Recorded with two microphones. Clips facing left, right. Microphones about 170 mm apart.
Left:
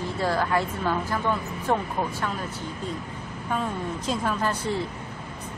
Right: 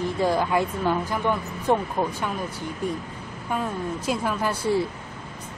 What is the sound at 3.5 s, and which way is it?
Speech, 5° right (ahead or behind).